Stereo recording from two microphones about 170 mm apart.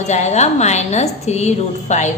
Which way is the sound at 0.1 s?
40° left (ahead or behind).